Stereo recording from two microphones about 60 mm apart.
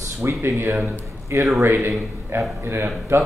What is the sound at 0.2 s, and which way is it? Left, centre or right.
A man's voice, right.